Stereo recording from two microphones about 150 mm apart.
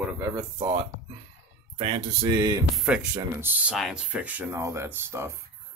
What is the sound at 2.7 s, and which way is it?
Speech, 5° right (ahead or behind).